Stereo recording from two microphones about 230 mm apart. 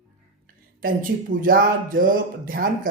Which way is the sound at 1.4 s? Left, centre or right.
Right.